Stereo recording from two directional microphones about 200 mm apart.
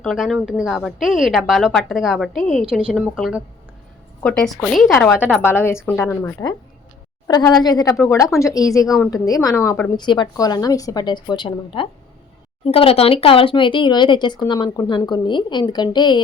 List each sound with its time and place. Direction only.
0.0 s a woman's voice: centre (ahead or behind)
5.4 s speech: 10° left (ahead or behind)
9.9 s speech: 20° left (ahead or behind)